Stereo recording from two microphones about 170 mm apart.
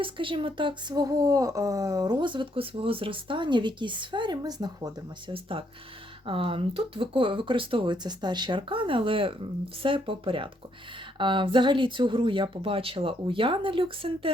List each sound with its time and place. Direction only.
0.0 s speech: 30° right (ahead or behind)